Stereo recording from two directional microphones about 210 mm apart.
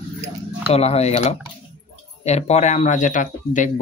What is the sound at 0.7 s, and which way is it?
Speech, 30° left (ahead or behind).